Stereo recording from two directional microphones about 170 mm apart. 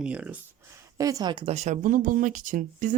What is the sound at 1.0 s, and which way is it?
Speech, 20° right (ahead or behind).